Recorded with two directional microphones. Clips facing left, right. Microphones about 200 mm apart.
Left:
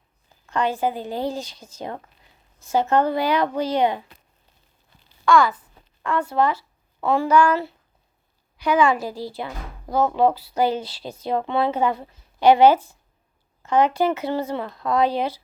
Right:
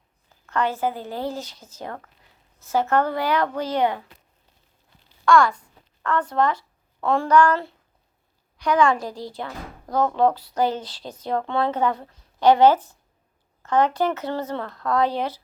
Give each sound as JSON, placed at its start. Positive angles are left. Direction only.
{"t": 0.4, "sound": "speech", "side_deg": 15}
{"t": 5.2, "sound": "speech", "side_deg": 0}